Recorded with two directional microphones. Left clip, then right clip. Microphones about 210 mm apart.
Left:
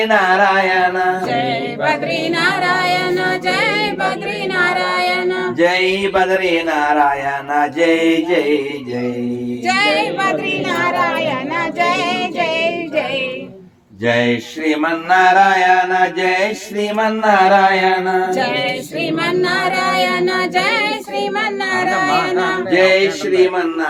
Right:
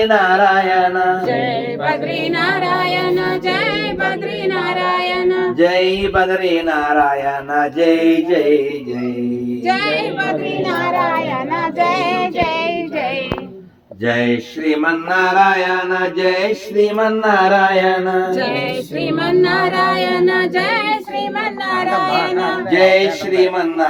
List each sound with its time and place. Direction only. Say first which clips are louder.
0.0 s mantra: right 1 dB; centre (ahead or behind)
1.9 s music: left 1 dB; 50° left (ahead or behind)
4.5 s female singing: left 3 dB; 50° left (ahead or behind)
5.5 s speech: left 2 dB; 5° left (ahead or behind)
6.7 s mantra: even; centre (ahead or behind)
9.6 s child singing: left 2 dB; 50° left (ahead or behind)
11.8 s a capella: right 1 dB; 50° left (ahead or behind)
14.7 s mantra: left 1 dB; centre (ahead or behind)
19.2 s music: right 3 dB; 45° left (ahead or behind)
21.7 s speech: even; 10° left (ahead or behind)
22.7 s speech: right 1 dB; 35° right (ahead or behind)